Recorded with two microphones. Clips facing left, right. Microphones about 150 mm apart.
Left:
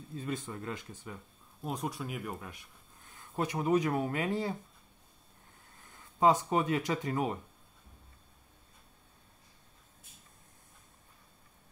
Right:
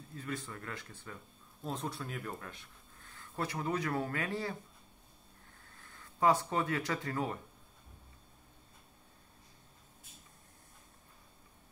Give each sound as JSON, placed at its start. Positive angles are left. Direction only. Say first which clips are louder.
{"t": 0.1, "sound": "speech", "louder": "left 4 dB", "side_deg": 20}
{"t": 6.1, "sound": "speech", "louder": "left 3 dB", "side_deg": 20}